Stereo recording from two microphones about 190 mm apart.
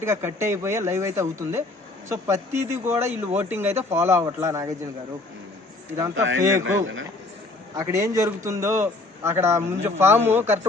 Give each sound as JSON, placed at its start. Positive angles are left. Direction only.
{"t": 0.0, "sound": "a man's voice", "side_deg": -15}
{"t": 6.1, "sound": "a man's voice", "side_deg": -90}
{"t": 7.8, "sound": "a man's voice", "side_deg": -15}